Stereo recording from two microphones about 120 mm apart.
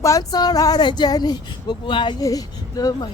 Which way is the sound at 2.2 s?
30° left (ahead or behind).